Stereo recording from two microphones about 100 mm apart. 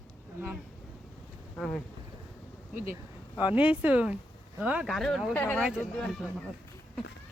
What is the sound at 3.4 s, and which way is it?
Speech, 15° right (ahead or behind).